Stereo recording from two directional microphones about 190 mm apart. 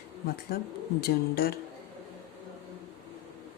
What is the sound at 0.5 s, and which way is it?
Speech, 55° left (ahead or behind).